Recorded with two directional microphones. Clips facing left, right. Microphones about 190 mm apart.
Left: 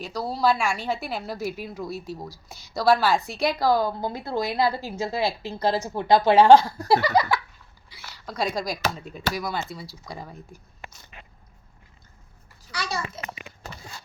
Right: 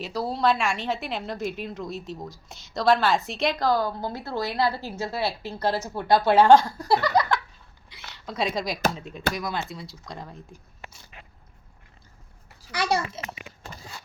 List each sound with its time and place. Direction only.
0.0 s a woman's voice: 5° right (ahead or behind)
6.9 s a sound: 10° left (ahead or behind)
7.9 s a woman's voice: centre (ahead or behind)
12.7 s a child's voice: 60° right (ahead or behind)